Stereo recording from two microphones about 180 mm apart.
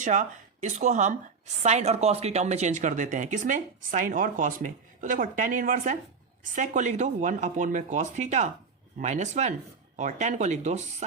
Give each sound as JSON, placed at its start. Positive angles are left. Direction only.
{"t": 0.0, "sound": "speech", "side_deg": -45}